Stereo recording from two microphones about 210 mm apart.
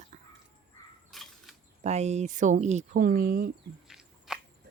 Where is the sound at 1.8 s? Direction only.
30° right (ahead or behind).